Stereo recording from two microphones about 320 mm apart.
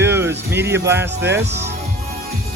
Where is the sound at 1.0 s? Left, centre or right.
Right.